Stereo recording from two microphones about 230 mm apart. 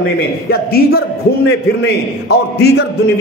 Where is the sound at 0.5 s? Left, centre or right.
Left.